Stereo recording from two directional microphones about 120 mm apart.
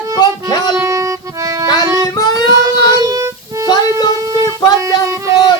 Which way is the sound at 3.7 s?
35° left (ahead or behind).